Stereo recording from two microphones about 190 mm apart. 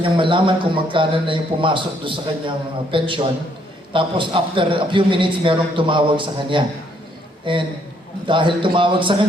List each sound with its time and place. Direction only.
0.0 s a man's voice: 25° right (ahead or behind)